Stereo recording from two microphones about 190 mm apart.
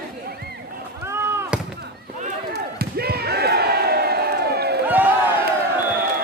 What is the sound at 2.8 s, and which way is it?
Slam, 55° right (ahead or behind).